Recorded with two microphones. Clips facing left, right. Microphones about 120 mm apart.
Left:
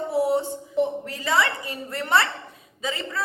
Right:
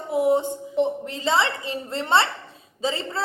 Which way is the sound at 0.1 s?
20° right (ahead or behind).